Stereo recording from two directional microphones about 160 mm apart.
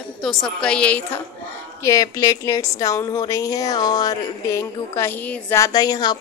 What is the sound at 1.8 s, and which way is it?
A woman's voice, 20° left (ahead or behind).